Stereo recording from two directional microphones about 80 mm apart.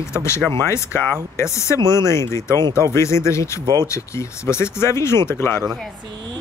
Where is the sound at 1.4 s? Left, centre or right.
Left.